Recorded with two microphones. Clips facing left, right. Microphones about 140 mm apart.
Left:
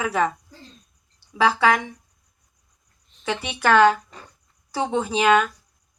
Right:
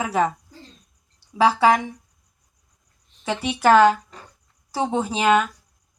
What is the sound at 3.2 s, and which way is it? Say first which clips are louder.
Speech: right 3 dB; 40° right (ahead or behind).